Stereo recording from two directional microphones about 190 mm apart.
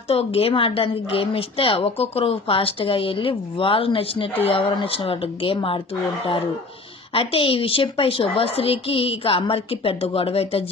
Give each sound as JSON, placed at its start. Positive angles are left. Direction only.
{"t": 0.1, "sound": "a woman's voice", "side_deg": 30}
{"t": 7.2, "sound": "a woman's voice", "side_deg": 30}